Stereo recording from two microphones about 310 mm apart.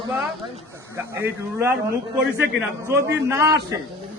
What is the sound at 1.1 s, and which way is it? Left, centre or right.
A man's voice, centre.